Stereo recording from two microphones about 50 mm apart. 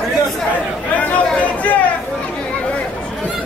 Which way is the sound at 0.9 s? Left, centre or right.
Left.